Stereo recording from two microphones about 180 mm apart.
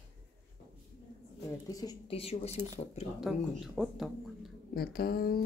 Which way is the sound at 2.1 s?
35° left (ahead or behind).